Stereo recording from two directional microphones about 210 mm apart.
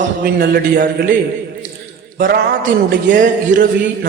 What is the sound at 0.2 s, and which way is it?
Speech, 50° right (ahead or behind).